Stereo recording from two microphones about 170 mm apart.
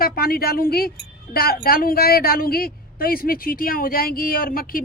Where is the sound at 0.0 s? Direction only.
60° left (ahead or behind).